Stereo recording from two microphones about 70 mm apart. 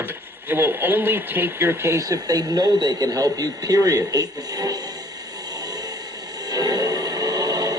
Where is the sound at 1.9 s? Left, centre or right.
Right.